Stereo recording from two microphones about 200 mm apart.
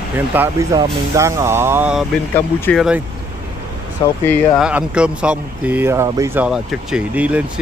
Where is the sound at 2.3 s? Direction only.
10° left (ahead or behind).